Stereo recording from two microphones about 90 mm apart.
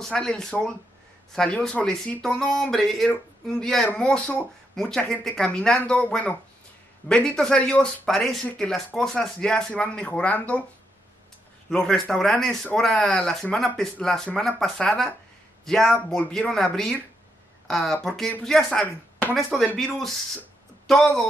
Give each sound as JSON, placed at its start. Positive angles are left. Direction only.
{"t": 0.0, "sound": "speech", "side_deg": 10}
{"t": 4.7, "sound": "speech", "side_deg": 5}
{"t": 7.1, "sound": "speech", "side_deg": 10}
{"t": 11.7, "sound": "speech", "side_deg": 5}
{"t": 20.8, "sound": "speech", "side_deg": 5}